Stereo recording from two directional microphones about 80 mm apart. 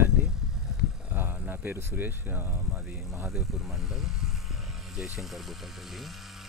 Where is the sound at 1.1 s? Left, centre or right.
Right.